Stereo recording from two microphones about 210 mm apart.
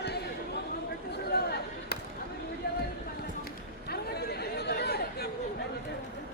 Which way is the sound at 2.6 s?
50° left (ahead or behind).